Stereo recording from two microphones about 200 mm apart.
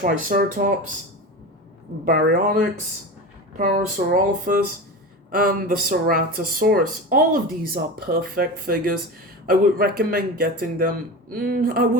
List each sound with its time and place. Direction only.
0.0 s speech: 40° right (ahead or behind)
2.0 s speech: 50° right (ahead or behind)